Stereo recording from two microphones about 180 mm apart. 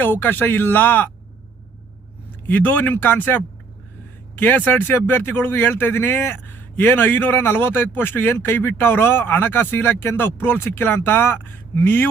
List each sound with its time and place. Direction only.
0.0 s speech: 10° left (ahead or behind)
2.5 s speech: 10° left (ahead or behind)